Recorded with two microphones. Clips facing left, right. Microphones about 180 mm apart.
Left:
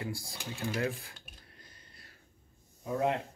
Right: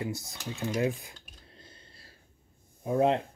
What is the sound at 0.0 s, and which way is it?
Speech, 20° right (ahead or behind).